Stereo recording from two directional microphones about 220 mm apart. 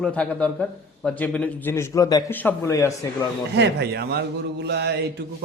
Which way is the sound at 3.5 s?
50° right (ahead or behind).